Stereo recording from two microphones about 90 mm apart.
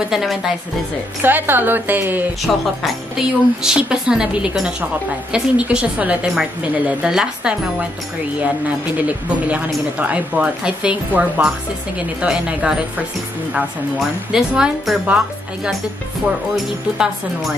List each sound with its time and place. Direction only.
0.1 s speech: centre (ahead or behind)
1.2 s a woman's voice: 25° right (ahead or behind)
2.4 s speech: centre (ahead or behind)
14.3 s speech: 5° right (ahead or behind)